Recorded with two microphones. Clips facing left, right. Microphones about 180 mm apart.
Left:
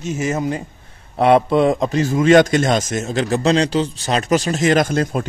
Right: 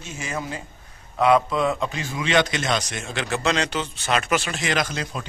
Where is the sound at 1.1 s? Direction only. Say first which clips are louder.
Left 5 dB; 30° left (ahead or behind); by 5.3 s 50° left (ahead or behind).